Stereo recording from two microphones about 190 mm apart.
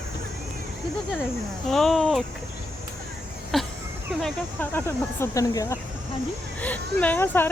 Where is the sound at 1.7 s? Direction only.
Centre (ahead or behind).